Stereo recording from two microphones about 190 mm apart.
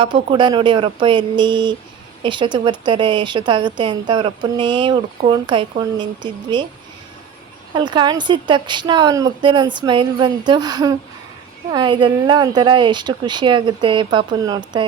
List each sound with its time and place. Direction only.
0.0 s a woman's voice: 25° right (ahead or behind)
7.7 s a woman's voice: 25° right (ahead or behind)